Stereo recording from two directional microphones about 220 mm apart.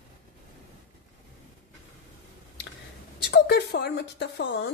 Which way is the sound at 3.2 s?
50° left (ahead or behind).